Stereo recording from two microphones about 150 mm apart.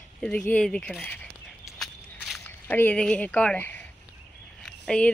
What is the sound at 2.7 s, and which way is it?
Speech, 10° left (ahead or behind).